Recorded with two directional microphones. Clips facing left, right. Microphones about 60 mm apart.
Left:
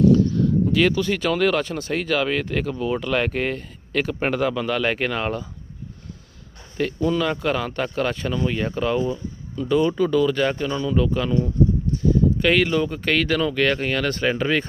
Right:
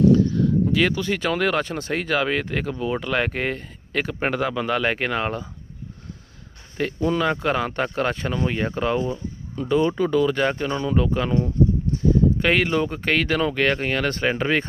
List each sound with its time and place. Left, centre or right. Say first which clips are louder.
0.0 s speech: even; right
7.0 s speech: right 1 dB; right
10.7 s speech: even; right